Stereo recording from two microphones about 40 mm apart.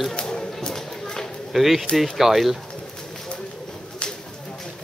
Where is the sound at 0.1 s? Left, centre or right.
Centre.